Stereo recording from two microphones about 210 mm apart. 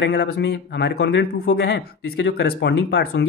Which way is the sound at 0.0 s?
55° left (ahead or behind).